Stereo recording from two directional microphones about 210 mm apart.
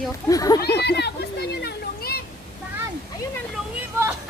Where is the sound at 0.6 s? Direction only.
50° left (ahead or behind).